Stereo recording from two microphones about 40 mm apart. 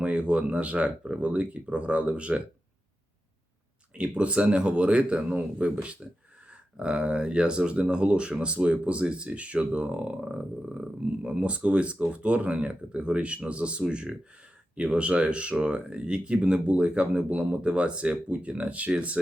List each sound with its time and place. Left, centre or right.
0.0 s speech: right
3.9 s speech: right
10.2 s speech: centre